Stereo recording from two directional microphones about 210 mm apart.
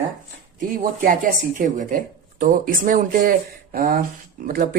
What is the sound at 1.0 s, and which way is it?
Speech, 40° right (ahead or behind).